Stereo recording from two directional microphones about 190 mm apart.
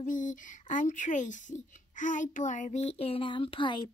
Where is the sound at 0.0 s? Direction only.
45° left (ahead or behind).